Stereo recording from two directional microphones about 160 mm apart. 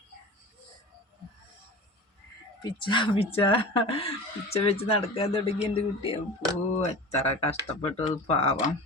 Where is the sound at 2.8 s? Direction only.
30° left (ahead or behind).